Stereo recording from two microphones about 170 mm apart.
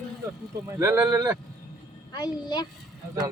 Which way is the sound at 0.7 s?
15° right (ahead or behind).